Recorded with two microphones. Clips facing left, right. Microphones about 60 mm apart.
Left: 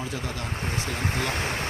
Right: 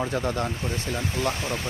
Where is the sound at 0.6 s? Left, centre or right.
Left.